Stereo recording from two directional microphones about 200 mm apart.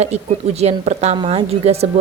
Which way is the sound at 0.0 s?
35° right (ahead or behind).